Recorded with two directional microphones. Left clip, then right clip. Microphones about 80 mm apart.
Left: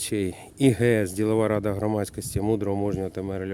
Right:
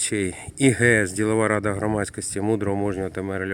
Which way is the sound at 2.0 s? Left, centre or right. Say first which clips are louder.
Right 2 dB; left.